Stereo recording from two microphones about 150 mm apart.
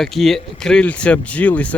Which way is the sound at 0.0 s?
Centre (ahead or behind).